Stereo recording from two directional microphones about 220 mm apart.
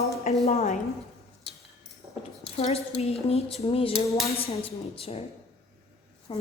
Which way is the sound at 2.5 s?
30° left (ahead or behind).